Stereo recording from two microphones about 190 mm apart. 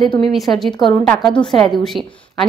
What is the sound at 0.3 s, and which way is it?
A woman's voice, centre (ahead or behind).